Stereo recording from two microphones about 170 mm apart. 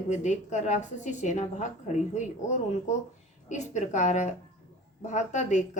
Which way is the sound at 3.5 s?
45° left (ahead or behind).